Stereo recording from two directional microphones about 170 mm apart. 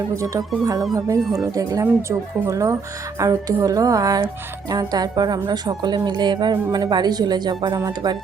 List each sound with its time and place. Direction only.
0.2 s a woman's voice: 20° right (ahead or behind)
1.2 s speech: centre (ahead or behind)
1.5 s a woman's voice: 20° right (ahead or behind)